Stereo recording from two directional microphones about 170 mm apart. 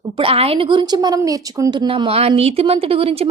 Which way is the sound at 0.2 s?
35° right (ahead or behind).